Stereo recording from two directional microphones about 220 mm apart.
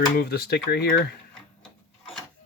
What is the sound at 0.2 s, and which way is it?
Speech, 45° left (ahead or behind).